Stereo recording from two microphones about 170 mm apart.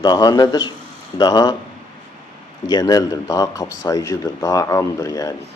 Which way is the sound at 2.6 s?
25° left (ahead or behind).